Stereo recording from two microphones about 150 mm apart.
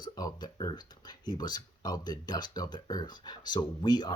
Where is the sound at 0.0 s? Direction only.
25° left (ahead or behind).